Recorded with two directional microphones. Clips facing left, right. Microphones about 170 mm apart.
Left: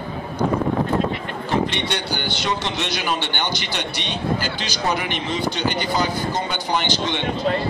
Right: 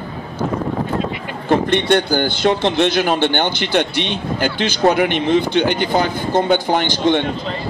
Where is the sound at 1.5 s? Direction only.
55° right (ahead or behind).